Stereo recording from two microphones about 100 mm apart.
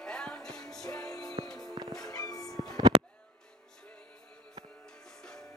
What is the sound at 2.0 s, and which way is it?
Music, 40° left (ahead or behind).